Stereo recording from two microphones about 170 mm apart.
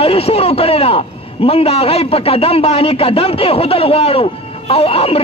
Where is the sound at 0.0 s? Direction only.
35° left (ahead or behind).